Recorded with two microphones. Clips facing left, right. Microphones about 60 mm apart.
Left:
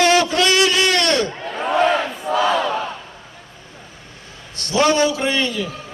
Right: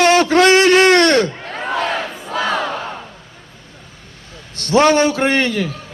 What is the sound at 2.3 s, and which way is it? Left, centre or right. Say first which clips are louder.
Battle cry: left 2 dB; right.